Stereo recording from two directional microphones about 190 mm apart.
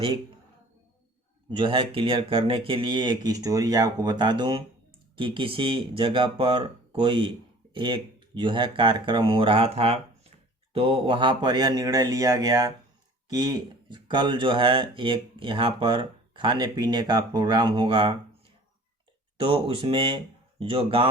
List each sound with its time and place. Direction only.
1.5 s speech: 25° right (ahead or behind)
19.4 s speech: 25° right (ahead or behind)